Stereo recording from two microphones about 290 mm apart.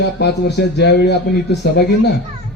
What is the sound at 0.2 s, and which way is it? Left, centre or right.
Speech, left.